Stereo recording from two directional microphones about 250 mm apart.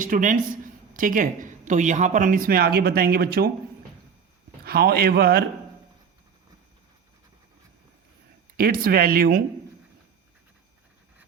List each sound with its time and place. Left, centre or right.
0.0 s speech: right
4.6 s speech: right
8.5 s speech: right